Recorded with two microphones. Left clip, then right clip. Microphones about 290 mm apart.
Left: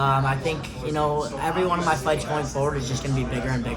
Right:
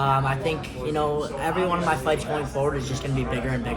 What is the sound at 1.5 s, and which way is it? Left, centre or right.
Speech, centre.